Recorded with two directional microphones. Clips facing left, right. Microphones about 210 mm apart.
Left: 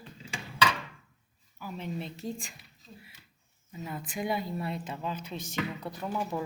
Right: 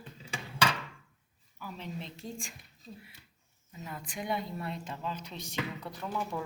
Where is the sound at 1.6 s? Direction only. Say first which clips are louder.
Left 4 dB; 5° left (ahead or behind).